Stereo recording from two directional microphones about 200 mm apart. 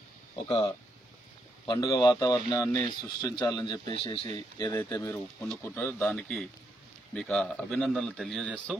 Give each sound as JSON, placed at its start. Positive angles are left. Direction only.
{"t": 0.5, "sound": "speech", "side_deg": 30}